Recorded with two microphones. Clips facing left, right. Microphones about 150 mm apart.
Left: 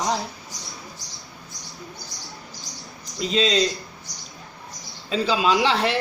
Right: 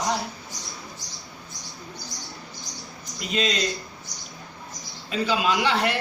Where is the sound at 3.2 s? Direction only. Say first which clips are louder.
Left 4 dB; 30° left (ahead or behind).